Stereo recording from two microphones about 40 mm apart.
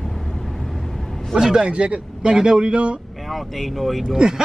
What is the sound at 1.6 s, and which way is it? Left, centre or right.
A man's voice, right.